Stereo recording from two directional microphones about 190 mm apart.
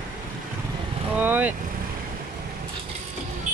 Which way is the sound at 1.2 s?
10° right (ahead or behind).